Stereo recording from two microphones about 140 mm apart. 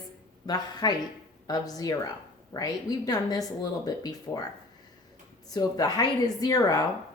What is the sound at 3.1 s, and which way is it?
A woman's voice, 25° left (ahead or behind).